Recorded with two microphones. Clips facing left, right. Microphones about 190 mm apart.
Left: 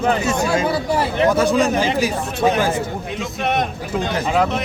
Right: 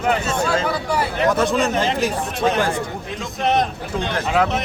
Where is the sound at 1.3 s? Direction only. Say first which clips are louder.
Left 2 dB; centre (ahead or behind).